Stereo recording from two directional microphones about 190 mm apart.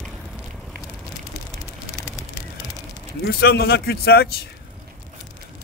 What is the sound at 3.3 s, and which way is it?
A man's voice, 60° left (ahead or behind).